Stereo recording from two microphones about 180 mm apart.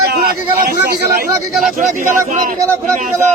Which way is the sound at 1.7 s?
45° right (ahead or behind).